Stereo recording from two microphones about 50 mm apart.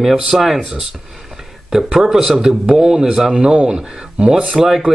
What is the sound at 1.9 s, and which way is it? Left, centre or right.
Speech, centre.